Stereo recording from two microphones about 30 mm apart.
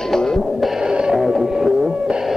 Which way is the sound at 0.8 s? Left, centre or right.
Right.